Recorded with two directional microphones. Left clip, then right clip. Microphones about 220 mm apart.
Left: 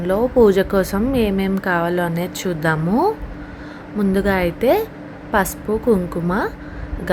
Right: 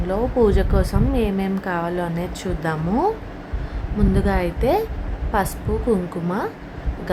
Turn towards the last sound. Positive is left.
turn(degrees=15)  # may be behind; listen again after turning